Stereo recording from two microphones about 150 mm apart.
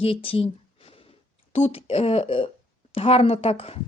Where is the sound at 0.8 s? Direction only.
40° left (ahead or behind).